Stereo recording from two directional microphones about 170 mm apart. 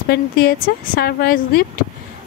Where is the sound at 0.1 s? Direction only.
65° left (ahead or behind).